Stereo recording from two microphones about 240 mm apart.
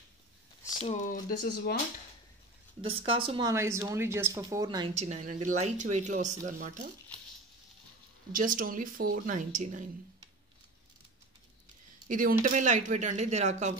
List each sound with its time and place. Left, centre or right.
0.7 s a sound: centre
1.4 s speech: left
2.9 s speech: right
8.3 s speech: right
12.1 s speech: right